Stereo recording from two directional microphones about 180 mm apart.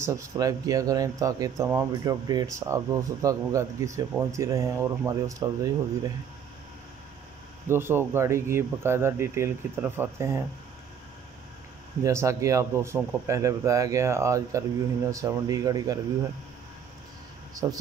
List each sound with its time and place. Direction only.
0.0 s speech: 15° right (ahead or behind)
7.6 s speech: 15° right (ahead or behind)
12.0 s speech: 15° right (ahead or behind)
17.6 s speech: 20° right (ahead or behind)